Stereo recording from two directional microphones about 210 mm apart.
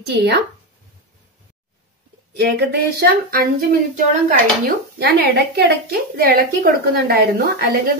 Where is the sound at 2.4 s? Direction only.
50° right (ahead or behind).